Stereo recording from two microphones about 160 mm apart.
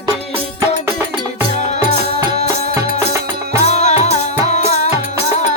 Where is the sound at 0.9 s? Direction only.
15° right (ahead or behind).